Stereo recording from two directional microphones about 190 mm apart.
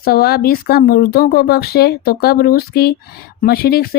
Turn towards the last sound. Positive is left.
turn(degrees=55)  # may be behind; listen again after turning